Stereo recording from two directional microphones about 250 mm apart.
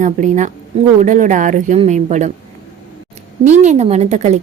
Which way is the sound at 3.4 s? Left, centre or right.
Right.